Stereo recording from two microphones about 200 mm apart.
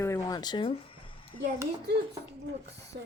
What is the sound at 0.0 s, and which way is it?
Music, 15° left (ahead or behind).